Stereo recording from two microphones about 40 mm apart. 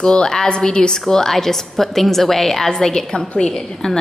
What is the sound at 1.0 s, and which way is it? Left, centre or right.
Speech, centre.